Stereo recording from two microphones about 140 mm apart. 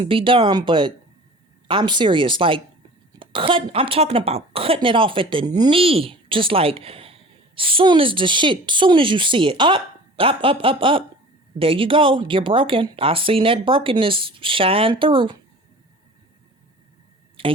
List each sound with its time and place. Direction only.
0.0 s a woman's voice: 40° right (ahead or behind)
5.7 s a woman's voice: 45° right (ahead or behind)
17.4 s speech: 40° right (ahead or behind)